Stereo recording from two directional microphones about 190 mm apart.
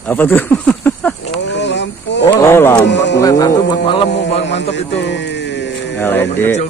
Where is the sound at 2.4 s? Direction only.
15° left (ahead or behind).